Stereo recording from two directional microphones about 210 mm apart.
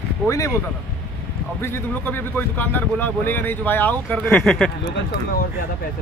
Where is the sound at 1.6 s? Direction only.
10° left (ahead or behind).